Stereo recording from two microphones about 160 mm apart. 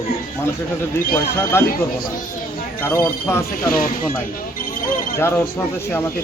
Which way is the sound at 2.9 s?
15° left (ahead or behind).